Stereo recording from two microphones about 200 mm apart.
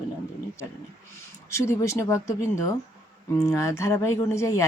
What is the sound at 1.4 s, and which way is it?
Speech, 15° left (ahead or behind).